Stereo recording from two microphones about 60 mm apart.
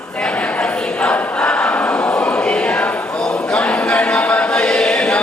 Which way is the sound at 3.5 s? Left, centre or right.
Centre.